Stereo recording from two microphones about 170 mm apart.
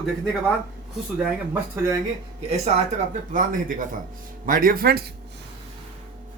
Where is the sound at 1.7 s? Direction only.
15° right (ahead or behind).